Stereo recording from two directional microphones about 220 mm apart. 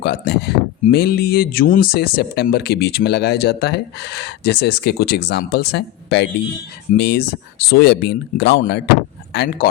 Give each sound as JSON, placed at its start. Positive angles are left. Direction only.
{"t": 0.0, "sound": "speech", "side_deg": 50}